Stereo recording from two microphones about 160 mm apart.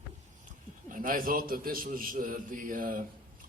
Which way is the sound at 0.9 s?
60° right (ahead or behind).